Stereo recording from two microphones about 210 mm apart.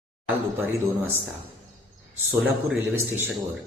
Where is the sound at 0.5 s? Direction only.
10° right (ahead or behind).